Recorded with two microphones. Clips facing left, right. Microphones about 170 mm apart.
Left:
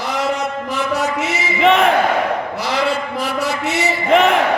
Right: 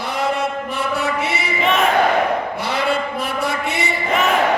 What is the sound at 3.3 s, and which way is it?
Chant, 80° left.